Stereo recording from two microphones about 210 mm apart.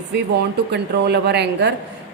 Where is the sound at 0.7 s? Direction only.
50° right (ahead or behind).